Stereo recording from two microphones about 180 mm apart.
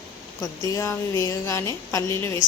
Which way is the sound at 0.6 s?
15° left (ahead or behind).